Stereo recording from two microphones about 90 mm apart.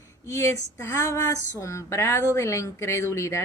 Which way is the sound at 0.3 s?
35° left (ahead or behind).